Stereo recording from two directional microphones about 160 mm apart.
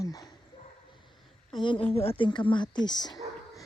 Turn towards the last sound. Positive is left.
turn(degrees=25)  # may be behind; listen again after turning